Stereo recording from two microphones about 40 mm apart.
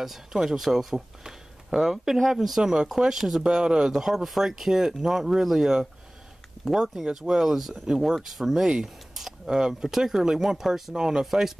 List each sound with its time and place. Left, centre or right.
0.0 s speech: centre
2.6 s speech: centre
3.4 s speech: centre
4.0 s speech: centre
8.8 s a sound: centre
9.5 s speech: centre